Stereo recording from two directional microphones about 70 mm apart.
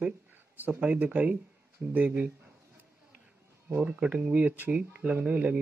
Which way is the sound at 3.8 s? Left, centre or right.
Centre.